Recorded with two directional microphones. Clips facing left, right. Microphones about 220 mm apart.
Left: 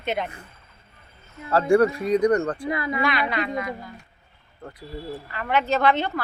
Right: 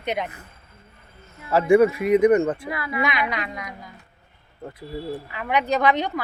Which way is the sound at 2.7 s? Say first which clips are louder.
Left 3 dB; 25° left (ahead or behind).